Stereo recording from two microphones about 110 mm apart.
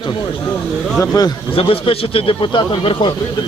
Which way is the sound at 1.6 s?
60° left (ahead or behind).